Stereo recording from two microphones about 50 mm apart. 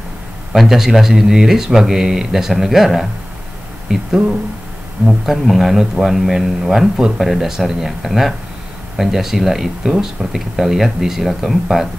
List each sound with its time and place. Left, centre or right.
0.5 s a man's voice: centre